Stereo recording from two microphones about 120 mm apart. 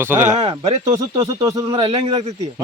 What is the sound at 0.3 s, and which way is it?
Speech, 45° right (ahead or behind).